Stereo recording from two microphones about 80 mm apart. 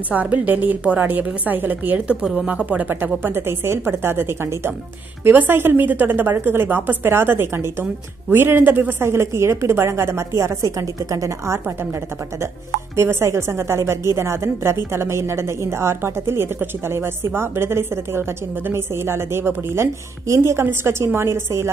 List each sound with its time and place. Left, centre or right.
0.1 s a woman's voice: centre; by 11.7 s right
12.9 s a woman's voice: right